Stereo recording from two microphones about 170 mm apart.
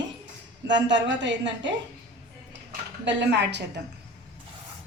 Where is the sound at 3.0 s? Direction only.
90° right.